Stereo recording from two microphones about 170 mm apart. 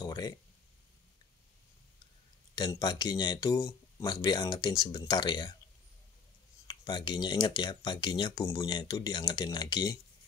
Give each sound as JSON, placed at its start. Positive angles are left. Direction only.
{"t": 0.0, "sound": "speech", "side_deg": 20}
{"t": 2.5, "sound": "speech", "side_deg": 25}
{"t": 6.7, "sound": "speech", "side_deg": 25}